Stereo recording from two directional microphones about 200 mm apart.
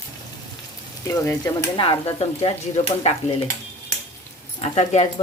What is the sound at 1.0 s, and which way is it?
Speech, 15° left (ahead or behind).